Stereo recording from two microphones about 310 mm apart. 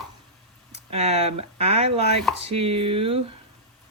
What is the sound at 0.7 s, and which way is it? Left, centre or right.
Speech, right.